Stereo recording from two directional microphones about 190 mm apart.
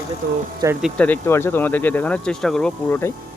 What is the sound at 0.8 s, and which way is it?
Speech, centre (ahead or behind).